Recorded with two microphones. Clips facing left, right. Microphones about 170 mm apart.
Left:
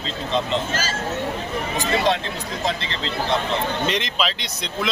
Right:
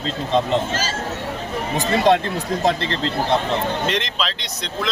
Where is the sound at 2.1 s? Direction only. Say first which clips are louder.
Right 6 dB; 50° right (ahead or behind).